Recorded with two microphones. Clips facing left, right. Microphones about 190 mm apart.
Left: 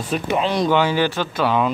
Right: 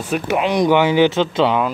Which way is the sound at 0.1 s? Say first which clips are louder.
Right 2 dB; 15° right (ahead or behind).